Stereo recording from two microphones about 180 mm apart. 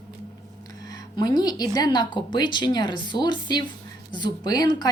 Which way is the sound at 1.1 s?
20° left (ahead or behind).